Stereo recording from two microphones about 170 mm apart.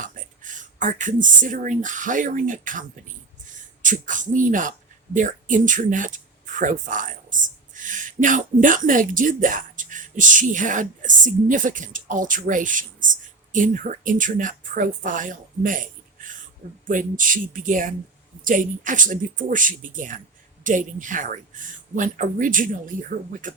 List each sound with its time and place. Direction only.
0.0 s speech: 50° right (ahead or behind)
3.8 s speech: 50° right (ahead or behind)